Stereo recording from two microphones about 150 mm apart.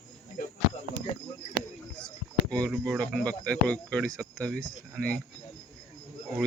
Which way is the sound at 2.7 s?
5° left (ahead or behind).